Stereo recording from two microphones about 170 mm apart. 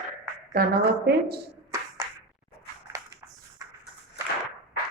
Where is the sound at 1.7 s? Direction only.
20° right (ahead or behind).